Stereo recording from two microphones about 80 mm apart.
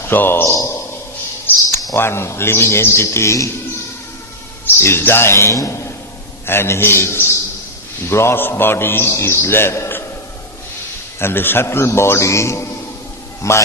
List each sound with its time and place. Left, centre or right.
0.0 s a man's voice: left
0.5 s a man's voice: left
2.0 s a man's voice: left
4.8 s a man's voice: left
6.4 s a man's voice: left
11.2 s a man's voice: left